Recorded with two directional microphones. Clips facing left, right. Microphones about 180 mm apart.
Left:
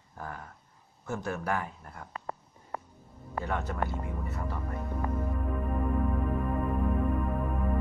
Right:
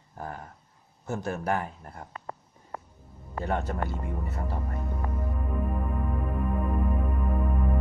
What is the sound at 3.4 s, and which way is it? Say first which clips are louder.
Speech: right 5 dB; 40° right (ahead or behind).